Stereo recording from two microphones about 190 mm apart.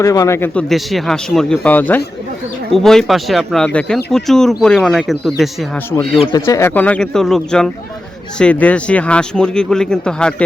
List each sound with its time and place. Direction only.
0.0 s speech: 15° left (ahead or behind)
0.7 s speech: centre (ahead or behind)
6.1 s speech: 25° left (ahead or behind)
6.4 s speech: 15° left (ahead or behind)